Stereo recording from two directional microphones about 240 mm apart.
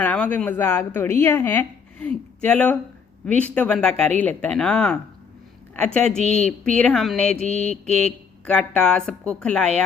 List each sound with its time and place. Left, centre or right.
0.0 s a woman's voice: centre
7.3 s mantra: left
7.7 s speech: centre